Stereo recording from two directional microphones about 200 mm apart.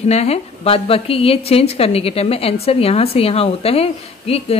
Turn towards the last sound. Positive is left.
turn(degrees=30)  # may be behind; listen again after turning